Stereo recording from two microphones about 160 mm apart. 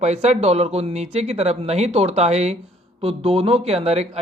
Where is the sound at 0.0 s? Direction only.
45° right (ahead or behind).